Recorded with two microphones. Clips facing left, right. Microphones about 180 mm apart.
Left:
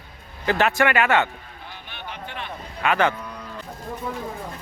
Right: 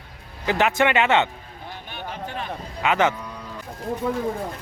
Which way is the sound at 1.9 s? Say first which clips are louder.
Right 4 dB; 40° right (ahead or behind).